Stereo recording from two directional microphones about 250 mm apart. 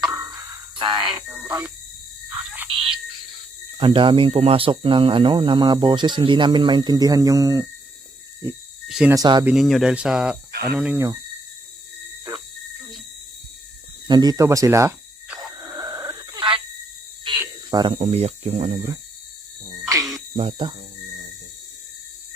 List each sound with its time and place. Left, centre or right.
0.1 s music: centre
0.8 s speech: centre
1.4 s speech: centre
2.7 s a sound: right
3.8 s speech: centre
8.4 s cricket: centre
9.1 s speech: centre
9.5 s speech: centre
12.3 s a sound: centre
14.1 s a sound: centre
17.3 s speech: centre
19.8 s a sound: centre
20.3 s speech: right